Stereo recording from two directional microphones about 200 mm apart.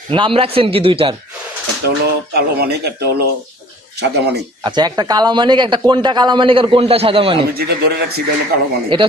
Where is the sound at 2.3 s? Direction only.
50° right (ahead or behind).